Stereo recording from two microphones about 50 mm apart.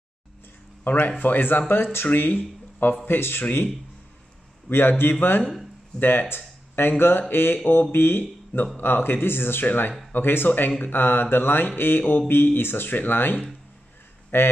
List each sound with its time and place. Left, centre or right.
0.8 s speech: left
1.7 s speech: left
2.0 s speech: left
4.6 s speech: left